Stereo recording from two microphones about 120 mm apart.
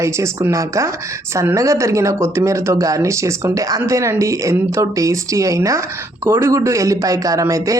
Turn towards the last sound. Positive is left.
turn(degrees=-25)  # may be behind; listen again after turning